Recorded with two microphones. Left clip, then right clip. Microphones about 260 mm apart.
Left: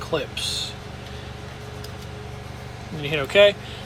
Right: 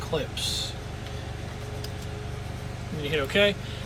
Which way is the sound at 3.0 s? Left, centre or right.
Centre.